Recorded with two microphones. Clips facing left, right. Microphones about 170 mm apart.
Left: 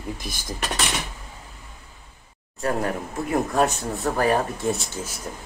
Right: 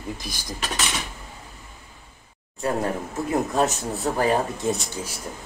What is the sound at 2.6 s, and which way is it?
Speech, 25° right (ahead or behind).